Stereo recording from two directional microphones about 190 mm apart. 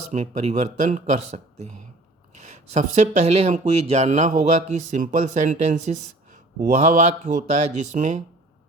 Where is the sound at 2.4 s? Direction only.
35° right (ahead or behind).